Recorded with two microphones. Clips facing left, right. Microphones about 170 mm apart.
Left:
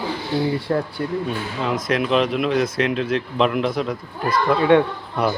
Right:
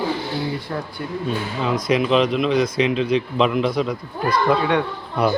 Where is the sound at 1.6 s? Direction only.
Centre (ahead or behind).